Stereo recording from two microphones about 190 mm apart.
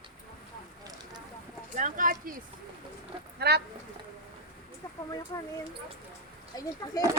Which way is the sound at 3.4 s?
60° right (ahead or behind).